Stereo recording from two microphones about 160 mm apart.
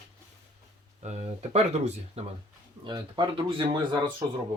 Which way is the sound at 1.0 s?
45° right (ahead or behind).